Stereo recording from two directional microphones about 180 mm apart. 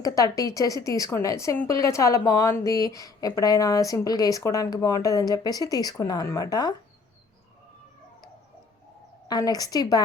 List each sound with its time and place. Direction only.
0.0 s a woman's voice: 20° left (ahead or behind)
9.2 s a woman's voice: 20° left (ahead or behind)